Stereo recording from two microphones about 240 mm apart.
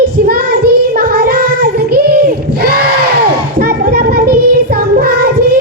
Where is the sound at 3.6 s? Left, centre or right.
Right.